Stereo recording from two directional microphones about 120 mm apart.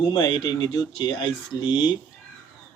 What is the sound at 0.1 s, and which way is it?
Speech, 40° left (ahead or behind).